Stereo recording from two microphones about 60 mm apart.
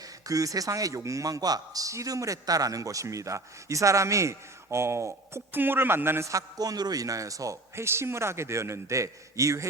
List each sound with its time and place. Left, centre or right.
0.3 s a man's voice: right
5.5 s speech: right
6.2 s a man's voice: right
7.8 s a man's voice: right